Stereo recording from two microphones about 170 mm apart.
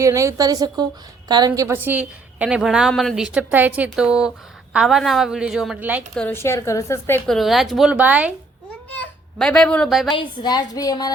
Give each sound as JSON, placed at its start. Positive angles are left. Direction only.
{"t": 0.0, "sound": "a woman's voice", "side_deg": -20}
{"t": 6.1, "sound": "a woman's voice", "side_deg": 10}
{"t": 7.3, "sound": "a woman's voice", "side_deg": 0}
{"t": 8.9, "sound": "a child's voice", "side_deg": 5}
{"t": 10.2, "sound": "a woman's voice", "side_deg": 25}